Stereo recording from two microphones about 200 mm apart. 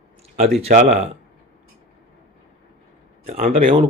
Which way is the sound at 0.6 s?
35° right (ahead or behind).